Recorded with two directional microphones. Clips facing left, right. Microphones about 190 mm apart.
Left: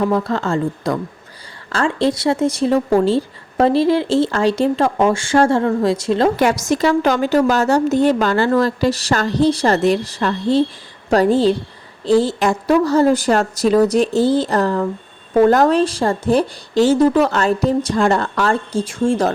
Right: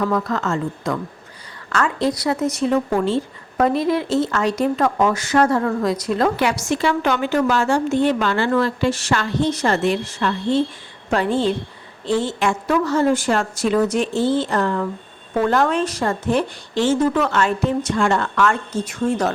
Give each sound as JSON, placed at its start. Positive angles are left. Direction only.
{"t": 0.0, "sound": "speech", "side_deg": 30}
{"t": 6.3, "sound": "a woman's voice", "side_deg": 45}